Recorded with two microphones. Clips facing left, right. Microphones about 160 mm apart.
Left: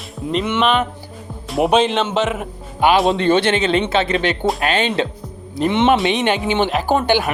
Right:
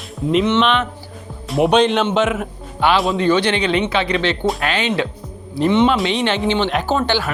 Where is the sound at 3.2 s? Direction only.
55° left (ahead or behind).